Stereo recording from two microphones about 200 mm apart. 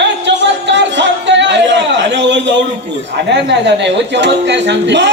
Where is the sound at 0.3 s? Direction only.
65° right (ahead or behind).